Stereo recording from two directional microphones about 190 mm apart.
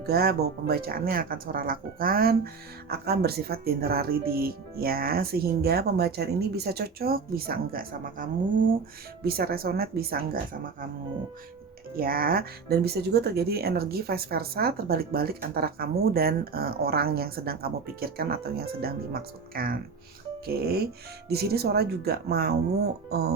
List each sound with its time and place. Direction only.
0.0 s speech: 55° right (ahead or behind)
11.9 s speech: 50° right (ahead or behind)
21.2 s speech: 55° right (ahead or behind)